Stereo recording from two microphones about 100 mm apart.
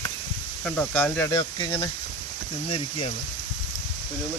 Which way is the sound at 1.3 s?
50° left (ahead or behind).